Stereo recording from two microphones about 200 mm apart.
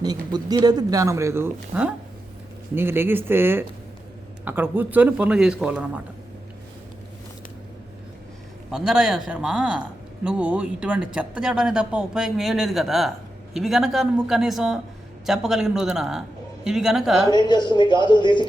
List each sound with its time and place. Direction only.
0.0 s speech: 20° right (ahead or behind); by 6.0 s 5° right (ahead or behind)
8.7 s speech: centre (ahead or behind)
17.3 s speech: 20° left (ahead or behind)